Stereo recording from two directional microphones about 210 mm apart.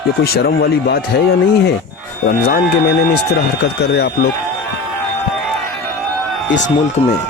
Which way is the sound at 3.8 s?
55° left (ahead or behind).